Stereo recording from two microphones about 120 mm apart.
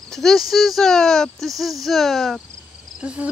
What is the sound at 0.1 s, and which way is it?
Speech, centre (ahead or behind).